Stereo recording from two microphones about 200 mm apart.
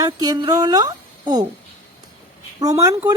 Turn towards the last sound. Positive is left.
turn(degrees=-15)  # may be behind; listen again after turning